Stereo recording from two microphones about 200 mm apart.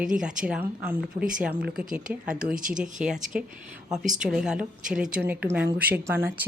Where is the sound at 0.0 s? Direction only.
5° right (ahead or behind).